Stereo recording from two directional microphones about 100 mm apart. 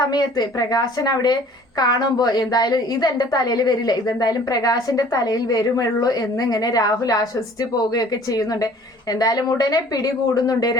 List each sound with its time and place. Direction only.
0.0 s a woman's voice: 45° left (ahead or behind)